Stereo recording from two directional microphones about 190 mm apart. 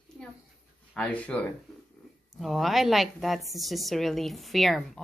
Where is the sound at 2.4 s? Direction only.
Centre (ahead or behind).